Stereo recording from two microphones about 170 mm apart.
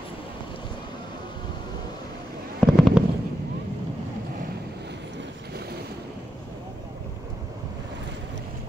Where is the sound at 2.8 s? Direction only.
Centre (ahead or behind).